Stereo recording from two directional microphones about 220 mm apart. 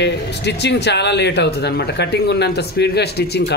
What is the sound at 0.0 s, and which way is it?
Speech, 50° left (ahead or behind).